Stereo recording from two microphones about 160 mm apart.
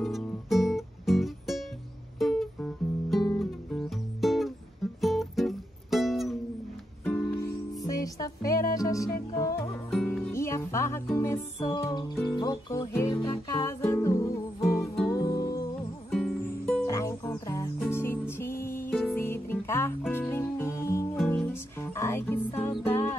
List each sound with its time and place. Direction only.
0.0 s music: centre (ahead or behind)
7.1 s music: 10° left (ahead or behind)
16.1 s music: 5° left (ahead or behind)
16.8 s music: 20° left (ahead or behind)